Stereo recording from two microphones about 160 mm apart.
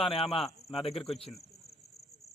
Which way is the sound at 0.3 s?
Centre (ahead or behind).